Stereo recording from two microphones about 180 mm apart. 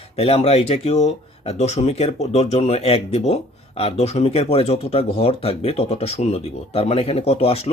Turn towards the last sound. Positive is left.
turn(degrees=35)  # may be behind; listen again after turning